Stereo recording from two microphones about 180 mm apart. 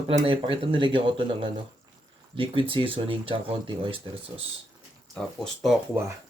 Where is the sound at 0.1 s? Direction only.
30° right (ahead or behind).